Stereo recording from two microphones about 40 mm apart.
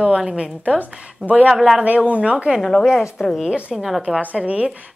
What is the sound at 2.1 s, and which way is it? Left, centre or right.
Speech, right.